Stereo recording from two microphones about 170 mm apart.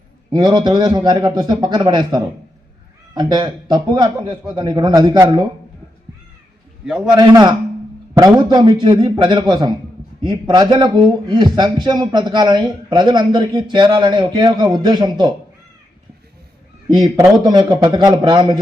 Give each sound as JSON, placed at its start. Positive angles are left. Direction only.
{"t": 0.3, "sound": "a man's voice", "side_deg": -25}
{"t": 6.8, "sound": "a man's voice", "side_deg": -5}
{"t": 7.2, "sound": "a man's voice", "side_deg": -25}
{"t": 16.9, "sound": "a man's voice", "side_deg": -25}